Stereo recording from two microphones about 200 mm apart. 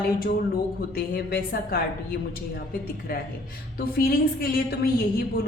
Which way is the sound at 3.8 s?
50° left (ahead or behind).